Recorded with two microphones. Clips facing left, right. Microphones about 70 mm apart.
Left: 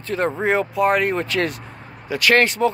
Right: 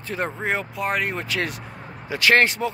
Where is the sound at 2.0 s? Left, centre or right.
Right.